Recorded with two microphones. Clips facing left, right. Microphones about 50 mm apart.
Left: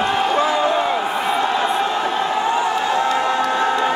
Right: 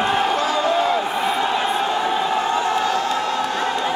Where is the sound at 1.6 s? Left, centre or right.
Centre.